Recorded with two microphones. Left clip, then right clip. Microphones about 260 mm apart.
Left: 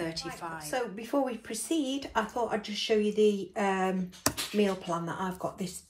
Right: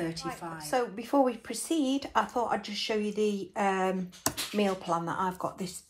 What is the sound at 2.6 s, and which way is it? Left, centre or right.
Speech, centre.